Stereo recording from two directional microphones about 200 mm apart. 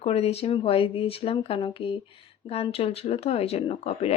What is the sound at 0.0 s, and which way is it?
Speech, 30° left (ahead or behind).